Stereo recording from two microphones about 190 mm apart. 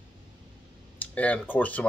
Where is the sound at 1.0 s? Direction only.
5° left (ahead or behind).